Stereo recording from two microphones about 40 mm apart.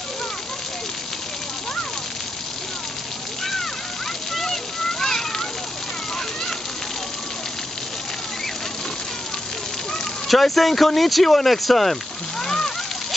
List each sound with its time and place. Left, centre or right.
4.3 s a sound: centre
5.0 s water: centre
10.2 s speech: centre